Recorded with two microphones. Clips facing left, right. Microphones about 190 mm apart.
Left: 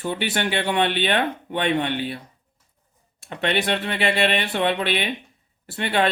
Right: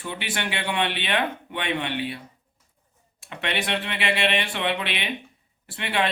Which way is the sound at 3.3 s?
40° left (ahead or behind).